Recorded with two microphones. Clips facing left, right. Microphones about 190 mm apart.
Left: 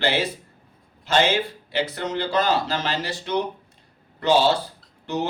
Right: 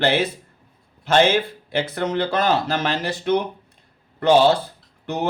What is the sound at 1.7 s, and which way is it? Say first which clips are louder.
Speech: right 3 dB; 50° right (ahead or behind).